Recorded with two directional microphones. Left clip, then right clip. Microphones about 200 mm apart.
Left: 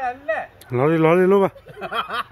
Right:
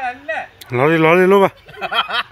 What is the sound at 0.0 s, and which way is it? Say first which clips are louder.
Speech: right 1 dB; 5° right (ahead or behind).